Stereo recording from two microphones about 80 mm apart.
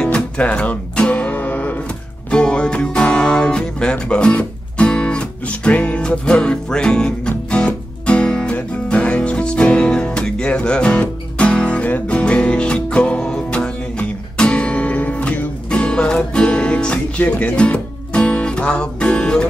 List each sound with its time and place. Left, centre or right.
0.0 s music: centre